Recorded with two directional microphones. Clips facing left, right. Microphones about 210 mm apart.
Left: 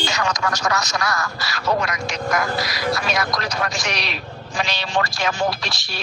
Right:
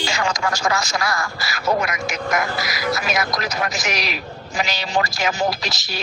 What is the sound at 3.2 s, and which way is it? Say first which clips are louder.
Speech: even; 20° right (ahead or behind).